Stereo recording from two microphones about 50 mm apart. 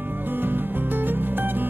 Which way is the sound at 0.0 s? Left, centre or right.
Right.